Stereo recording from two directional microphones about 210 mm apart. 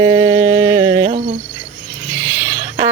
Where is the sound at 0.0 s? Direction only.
15° right (ahead or behind).